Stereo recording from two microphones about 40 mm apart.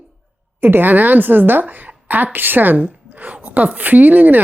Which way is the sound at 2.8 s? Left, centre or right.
Right.